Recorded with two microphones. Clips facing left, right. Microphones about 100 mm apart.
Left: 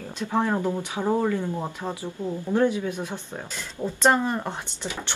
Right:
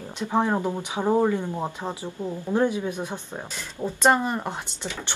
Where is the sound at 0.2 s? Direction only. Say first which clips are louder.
Right 1 dB; 15° right (ahead or behind).